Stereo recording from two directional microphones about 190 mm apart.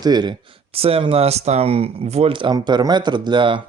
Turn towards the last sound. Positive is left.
turn(degrees=-25)  # may be behind; listen again after turning